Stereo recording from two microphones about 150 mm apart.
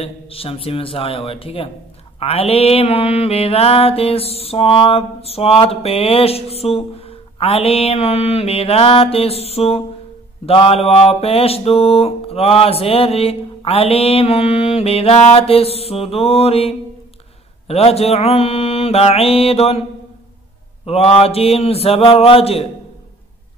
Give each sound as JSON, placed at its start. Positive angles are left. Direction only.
{"t": 0.0, "sound": "mantra", "side_deg": 40}
{"t": 20.8, "sound": "mantra", "side_deg": 40}